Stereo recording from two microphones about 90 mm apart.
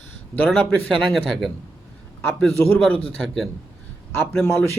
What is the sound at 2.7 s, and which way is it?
Speech, 10° left (ahead or behind).